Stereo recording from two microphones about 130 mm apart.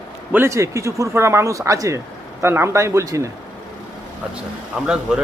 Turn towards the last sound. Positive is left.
turn(degrees=-5)  # may be behind; listen again after turning